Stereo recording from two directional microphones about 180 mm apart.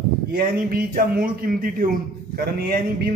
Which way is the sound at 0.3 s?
55° right (ahead or behind).